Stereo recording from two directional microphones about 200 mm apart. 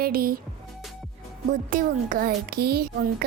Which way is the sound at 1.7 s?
45° right (ahead or behind).